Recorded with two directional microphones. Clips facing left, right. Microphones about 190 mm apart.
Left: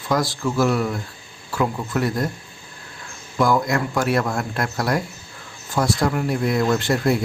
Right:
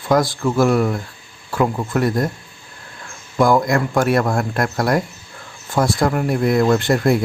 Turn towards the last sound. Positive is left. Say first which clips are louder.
# right 4 dB
turn(degrees=-55)  # may be behind; listen again after turning